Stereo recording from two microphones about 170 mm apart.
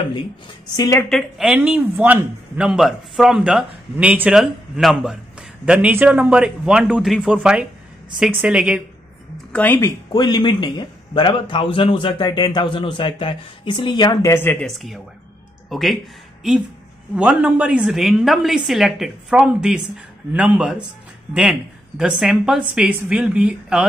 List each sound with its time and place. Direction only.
0.7 s a man's voice: 20° left (ahead or behind)
1.0 s a man's voice: centre (ahead or behind)
9.5 s speech: 10° left (ahead or behind)
10.1 s a man's voice: 25° left (ahead or behind)
14.7 s a man's voice: centre (ahead or behind)
17.1 s a man's voice: 5° right (ahead or behind)